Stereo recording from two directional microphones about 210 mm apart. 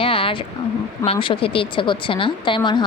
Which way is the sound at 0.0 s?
25° left (ahead or behind).